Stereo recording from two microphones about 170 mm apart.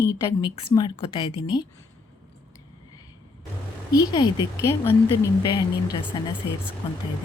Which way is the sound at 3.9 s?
25° left (ahead or behind).